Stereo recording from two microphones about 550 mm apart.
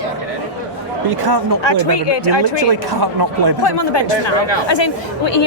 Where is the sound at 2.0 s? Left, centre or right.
Left.